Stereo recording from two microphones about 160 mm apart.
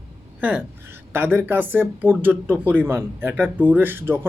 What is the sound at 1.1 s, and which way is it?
Speech, 15° right (ahead or behind).